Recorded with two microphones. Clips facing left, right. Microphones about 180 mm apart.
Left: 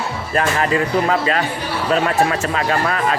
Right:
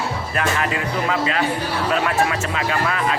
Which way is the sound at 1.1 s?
40° left (ahead or behind).